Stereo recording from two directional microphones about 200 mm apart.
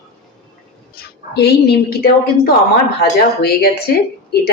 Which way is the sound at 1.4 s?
55° left (ahead or behind).